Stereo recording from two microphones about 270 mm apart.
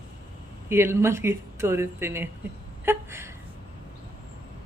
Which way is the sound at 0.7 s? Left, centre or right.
Centre.